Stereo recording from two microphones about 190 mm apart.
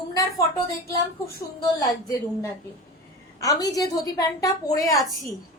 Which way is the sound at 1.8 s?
20° left (ahead or behind).